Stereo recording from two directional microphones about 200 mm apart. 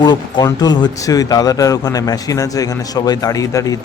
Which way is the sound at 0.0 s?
20° left (ahead or behind).